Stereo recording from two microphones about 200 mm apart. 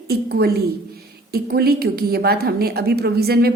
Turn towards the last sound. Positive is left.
turn(degrees=-50)  # may be behind; listen again after turning